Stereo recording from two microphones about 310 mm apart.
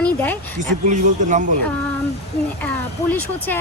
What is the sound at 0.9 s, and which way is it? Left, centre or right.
Speech, right.